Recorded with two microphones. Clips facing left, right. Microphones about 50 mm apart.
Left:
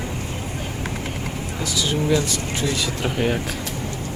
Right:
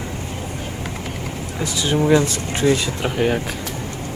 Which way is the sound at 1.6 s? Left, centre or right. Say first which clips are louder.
Right 4 dB; right.